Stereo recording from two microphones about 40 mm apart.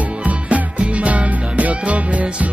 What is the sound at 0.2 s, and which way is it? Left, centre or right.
Music, right.